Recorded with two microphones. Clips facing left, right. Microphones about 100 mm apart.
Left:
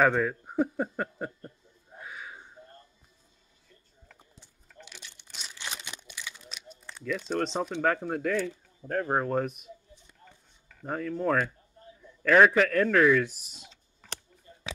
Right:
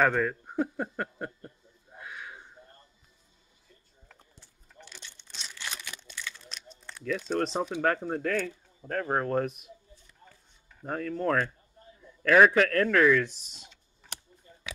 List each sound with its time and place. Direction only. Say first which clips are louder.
0.0 s a sound: left 1 dB; 5° left (ahead or behind)
4.2 s crumpling: left 1 dB; 10° left (ahead or behind)
6.5 s speech: left 1 dB; 5° left (ahead or behind)
8.3 s speech: left 3 dB; 15° left (ahead or behind)
9.0 s speech: even; 5° left (ahead or behind)
10.9 s speech: left 1 dB; 5° left (ahead or behind)
12.0 s a man's voice: even; 5° right (ahead or behind)